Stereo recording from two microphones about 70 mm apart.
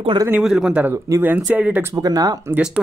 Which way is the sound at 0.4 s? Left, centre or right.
Centre.